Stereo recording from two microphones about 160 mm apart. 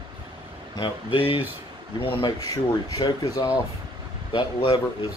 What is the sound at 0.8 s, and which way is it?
Speech, 35° left (ahead or behind).